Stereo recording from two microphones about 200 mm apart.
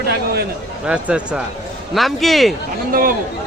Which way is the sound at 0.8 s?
5° right (ahead or behind).